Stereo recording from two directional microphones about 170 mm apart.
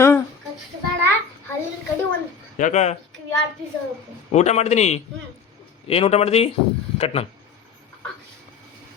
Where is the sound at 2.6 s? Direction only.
45° left (ahead or behind).